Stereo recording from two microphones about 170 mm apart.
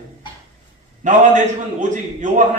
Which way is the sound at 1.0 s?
45° right (ahead or behind).